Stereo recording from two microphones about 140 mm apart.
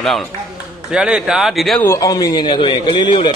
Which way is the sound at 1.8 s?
20° left (ahead or behind).